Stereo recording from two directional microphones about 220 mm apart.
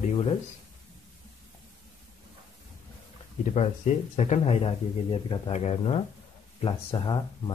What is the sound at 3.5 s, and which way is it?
Speech, 30° left (ahead or behind).